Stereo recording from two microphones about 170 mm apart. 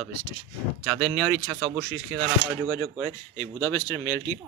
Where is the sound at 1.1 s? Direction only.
15° left (ahead or behind).